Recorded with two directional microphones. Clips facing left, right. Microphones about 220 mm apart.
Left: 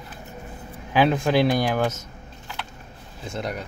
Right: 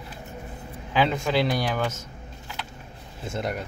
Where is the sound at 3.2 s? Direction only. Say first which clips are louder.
Right 1 dB; 5° right (ahead or behind).